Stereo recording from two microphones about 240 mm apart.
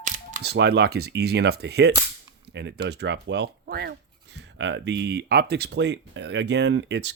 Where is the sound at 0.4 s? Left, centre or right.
Right.